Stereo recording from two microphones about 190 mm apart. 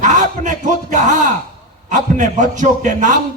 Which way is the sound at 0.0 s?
40° right (ahead or behind).